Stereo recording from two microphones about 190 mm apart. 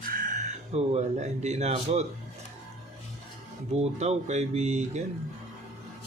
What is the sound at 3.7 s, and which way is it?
Speech, 35° right (ahead or behind).